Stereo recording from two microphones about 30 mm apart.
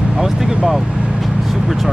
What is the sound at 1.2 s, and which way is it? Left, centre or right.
Vehicle, centre.